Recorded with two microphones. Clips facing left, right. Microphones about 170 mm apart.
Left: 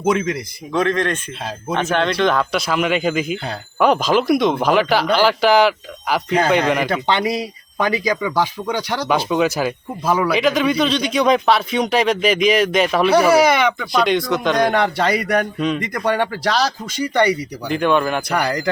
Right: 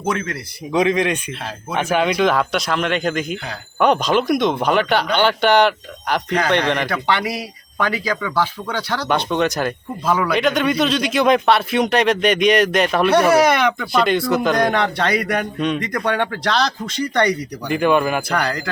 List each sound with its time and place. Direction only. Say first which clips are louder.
0.0 s speech: left 5 dB; 15° left (ahead or behind)
0.7 s a man's voice: right 2 dB; 15° right (ahead or behind); by 6.8 s 5° left (ahead or behind)
6.8 s speech: left 2 dB; 20° left (ahead or behind)
9.0 s a man's voice: left 1 dB; 5° left (ahead or behind)
17.7 s a man's voice: right 1 dB; 5° right (ahead or behind)
18.3 s speech: left 2 dB; 15° left (ahead or behind)